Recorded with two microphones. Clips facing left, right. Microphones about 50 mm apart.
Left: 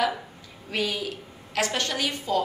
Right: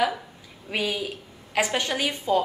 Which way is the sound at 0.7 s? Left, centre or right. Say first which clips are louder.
Right 1 dB; centre.